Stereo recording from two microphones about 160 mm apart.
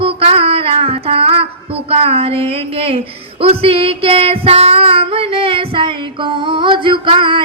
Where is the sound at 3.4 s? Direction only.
35° right (ahead or behind).